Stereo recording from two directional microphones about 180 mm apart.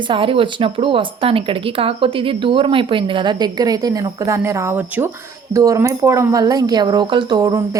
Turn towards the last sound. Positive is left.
turn(degrees=-20)  # may be behind; listen again after turning